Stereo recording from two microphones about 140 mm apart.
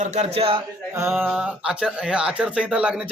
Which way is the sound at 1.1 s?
Centre (ahead or behind).